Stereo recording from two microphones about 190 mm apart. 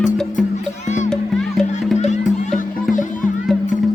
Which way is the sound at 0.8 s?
40° left (ahead or behind).